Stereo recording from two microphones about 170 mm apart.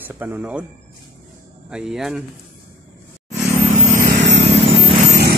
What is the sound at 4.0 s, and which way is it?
Vehicle, 80° right.